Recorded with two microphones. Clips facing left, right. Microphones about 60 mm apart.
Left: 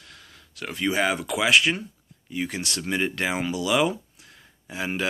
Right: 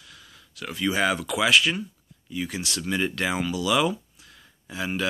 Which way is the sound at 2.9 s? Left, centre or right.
Left.